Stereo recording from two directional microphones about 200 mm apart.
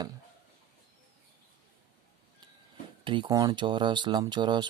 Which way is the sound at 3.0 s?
25° right (ahead or behind).